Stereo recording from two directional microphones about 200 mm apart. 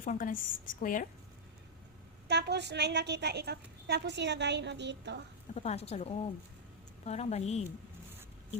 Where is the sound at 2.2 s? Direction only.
55° right (ahead or behind).